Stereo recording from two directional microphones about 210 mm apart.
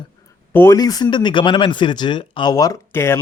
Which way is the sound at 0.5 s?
15° left (ahead or behind).